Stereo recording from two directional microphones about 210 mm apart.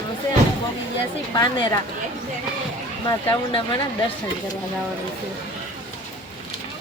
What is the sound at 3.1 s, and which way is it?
Speech, 20° left (ahead or behind).